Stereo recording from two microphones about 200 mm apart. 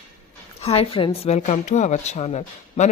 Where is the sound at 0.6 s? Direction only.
30° left (ahead or behind).